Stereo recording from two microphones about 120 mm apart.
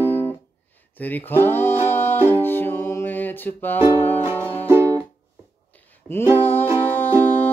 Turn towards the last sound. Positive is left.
turn(degrees=15)  # may be behind; listen again after turning